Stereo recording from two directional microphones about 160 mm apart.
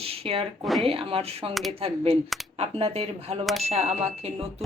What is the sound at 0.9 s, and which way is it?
Speech, 35° right (ahead or behind).